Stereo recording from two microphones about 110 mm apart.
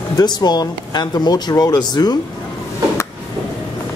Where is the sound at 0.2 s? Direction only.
40° left (ahead or behind).